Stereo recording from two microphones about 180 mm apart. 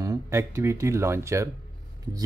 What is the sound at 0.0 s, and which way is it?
Speech, 15° right (ahead or behind).